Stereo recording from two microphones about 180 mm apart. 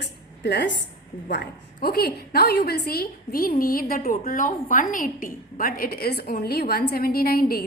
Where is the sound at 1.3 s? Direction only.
60° left (ahead or behind).